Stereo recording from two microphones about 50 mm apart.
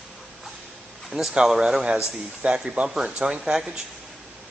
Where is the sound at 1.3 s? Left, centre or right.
Centre.